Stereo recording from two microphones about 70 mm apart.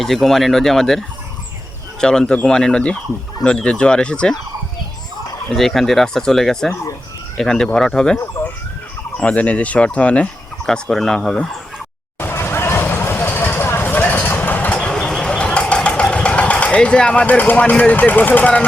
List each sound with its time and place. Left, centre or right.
0.0 s fowl: centre
2.0 s speech: centre
5.5 s fowl: centre
7.3 s speech: centre
10.7 s speech: centre
12.2 s vehicle: left